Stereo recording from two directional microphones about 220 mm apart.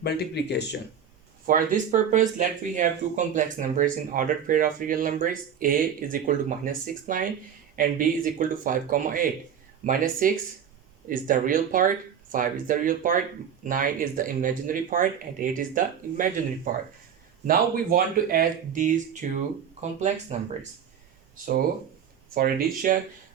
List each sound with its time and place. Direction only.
0.0 s speech: 50° left (ahead or behind)
1.5 s speech: 35° right (ahead or behind)
20.3 s speech: 35° right (ahead or behind)
22.4 s speech: 40° right (ahead or behind)